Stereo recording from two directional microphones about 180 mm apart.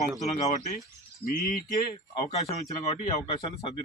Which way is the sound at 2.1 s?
35° left (ahead or behind).